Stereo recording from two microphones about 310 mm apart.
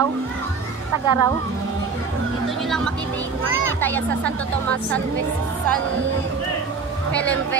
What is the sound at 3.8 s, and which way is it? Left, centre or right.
A woman's voice, centre.